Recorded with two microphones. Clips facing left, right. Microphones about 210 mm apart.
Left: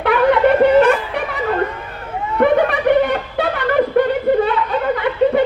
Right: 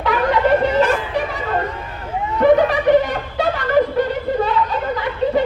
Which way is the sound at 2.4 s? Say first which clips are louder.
Right 1 dB; 60° left (ahead or behind).